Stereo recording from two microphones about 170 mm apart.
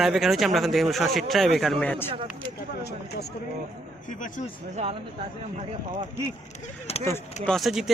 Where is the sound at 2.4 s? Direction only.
75° left (ahead or behind).